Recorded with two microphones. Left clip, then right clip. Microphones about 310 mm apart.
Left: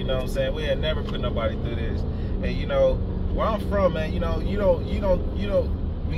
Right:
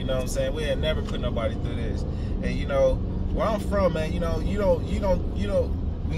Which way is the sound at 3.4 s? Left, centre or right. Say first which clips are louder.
Left 1 dB; centre.